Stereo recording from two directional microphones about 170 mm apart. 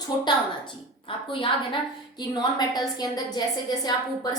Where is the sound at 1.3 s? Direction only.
30° left (ahead or behind).